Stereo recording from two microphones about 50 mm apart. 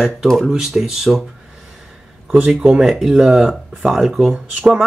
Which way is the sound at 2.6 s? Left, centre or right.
Centre.